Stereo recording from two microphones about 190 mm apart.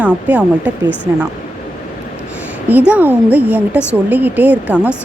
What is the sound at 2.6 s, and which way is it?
A woman's voice, 10° right (ahead or behind).